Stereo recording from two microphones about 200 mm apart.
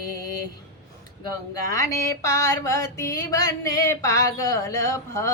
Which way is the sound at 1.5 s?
15° left (ahead or behind).